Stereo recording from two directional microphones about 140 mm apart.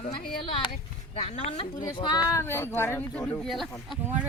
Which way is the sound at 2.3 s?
15° left (ahead or behind).